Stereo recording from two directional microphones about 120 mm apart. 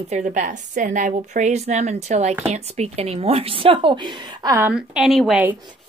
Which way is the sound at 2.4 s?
60° right (ahead or behind).